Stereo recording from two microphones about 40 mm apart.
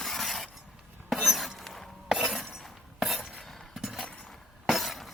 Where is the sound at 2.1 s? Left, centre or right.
Centre.